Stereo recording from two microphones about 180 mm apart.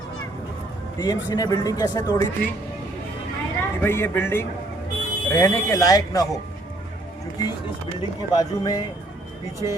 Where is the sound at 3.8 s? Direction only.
15° left (ahead or behind).